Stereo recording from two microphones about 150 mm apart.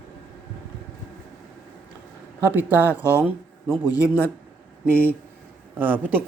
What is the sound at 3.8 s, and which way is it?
Speech, 25° left (ahead or behind).